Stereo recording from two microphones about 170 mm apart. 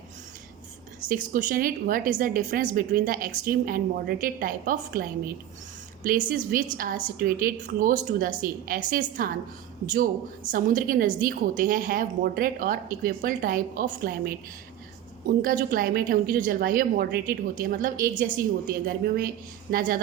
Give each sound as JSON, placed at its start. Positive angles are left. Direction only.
{"t": 1.0, "sound": "a woman's voice", "side_deg": -50}
{"t": 10.5, "sound": "a woman's voice", "side_deg": -55}
{"t": 15.4, "sound": "a woman's voice", "side_deg": -55}